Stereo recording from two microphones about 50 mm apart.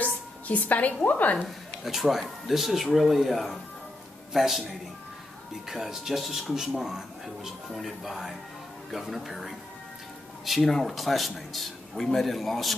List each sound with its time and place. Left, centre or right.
0.0 s a sound: left
1.0 s a woman's voice: left
1.9 s speech: centre
5.7 s speech: centre
7.4 s speech: centre